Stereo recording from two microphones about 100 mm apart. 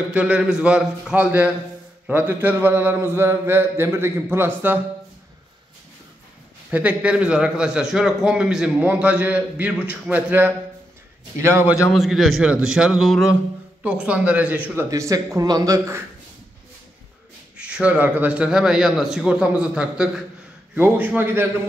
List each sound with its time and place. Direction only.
0.1 s a man's voice: 10° right (ahead or behind)
6.7 s a man's voice: 15° right (ahead or behind)
11.9 s a man's voice: centre (ahead or behind)
13.8 s a man's voice: 10° right (ahead or behind)
14.9 s a man's voice: 35° right (ahead or behind)
17.6 s a man's voice: 10° right (ahead or behind)